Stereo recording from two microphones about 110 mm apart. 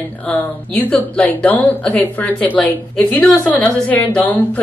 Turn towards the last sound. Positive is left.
turn(degrees=15)  # may be behind; listen again after turning